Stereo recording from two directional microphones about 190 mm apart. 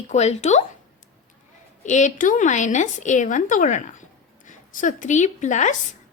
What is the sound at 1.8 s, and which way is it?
A woman's voice, 40° left (ahead or behind).